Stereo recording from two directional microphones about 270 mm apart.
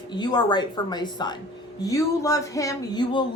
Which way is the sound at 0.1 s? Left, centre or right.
Centre.